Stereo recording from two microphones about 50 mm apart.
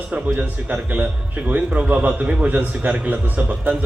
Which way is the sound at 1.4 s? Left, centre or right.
Right.